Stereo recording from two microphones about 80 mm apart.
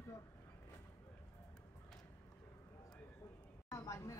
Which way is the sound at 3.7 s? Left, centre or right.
Left.